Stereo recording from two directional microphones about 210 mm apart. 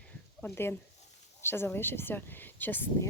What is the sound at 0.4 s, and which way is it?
Speech, 10° left (ahead or behind).